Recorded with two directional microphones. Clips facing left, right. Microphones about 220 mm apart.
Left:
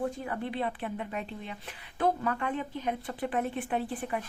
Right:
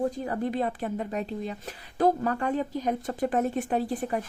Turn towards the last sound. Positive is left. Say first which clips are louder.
# right 5 dB
turn(degrees=-40)  # may be behind; listen again after turning